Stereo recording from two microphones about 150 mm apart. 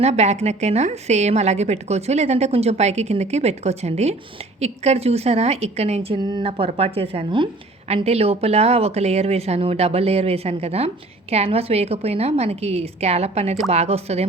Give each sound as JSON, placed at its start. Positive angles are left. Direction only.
{"t": 0.0, "sound": "speech", "side_deg": -45}